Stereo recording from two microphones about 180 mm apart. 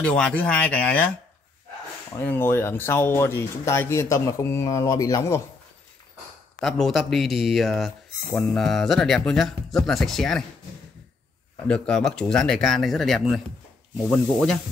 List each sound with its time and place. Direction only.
0.0 s speech: 5° left (ahead or behind)
2.1 s speech: 10° left (ahead or behind)
6.6 s speech: centre (ahead or behind)
11.6 s speech: 5° left (ahead or behind)